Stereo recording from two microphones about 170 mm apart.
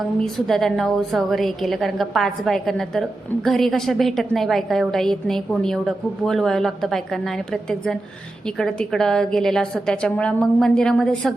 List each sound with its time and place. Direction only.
0.3 s a woman's voice: centre (ahead or behind)